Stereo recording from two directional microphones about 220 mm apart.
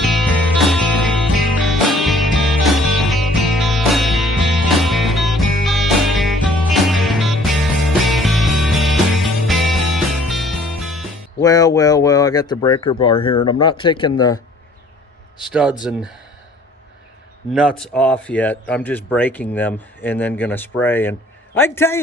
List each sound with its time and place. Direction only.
0.0 s music: centre (ahead or behind)
11.4 s speech: 15° left (ahead or behind)
15.4 s speech: 5° right (ahead or behind)
17.5 s speech: centre (ahead or behind)